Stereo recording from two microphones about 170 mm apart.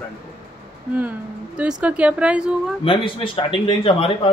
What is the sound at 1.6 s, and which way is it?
Speech, 5° right (ahead or behind).